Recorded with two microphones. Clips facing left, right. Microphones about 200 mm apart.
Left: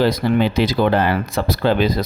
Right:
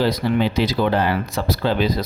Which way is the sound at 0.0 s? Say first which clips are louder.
Left 3 dB; 50° left (ahead or behind).